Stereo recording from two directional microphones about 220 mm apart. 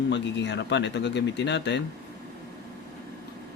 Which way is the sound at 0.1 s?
50° left (ahead or behind).